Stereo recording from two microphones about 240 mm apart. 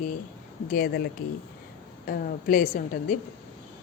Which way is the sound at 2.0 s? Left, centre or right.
Left.